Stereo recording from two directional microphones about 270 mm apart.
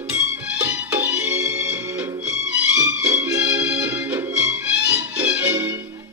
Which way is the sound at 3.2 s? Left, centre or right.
Centre.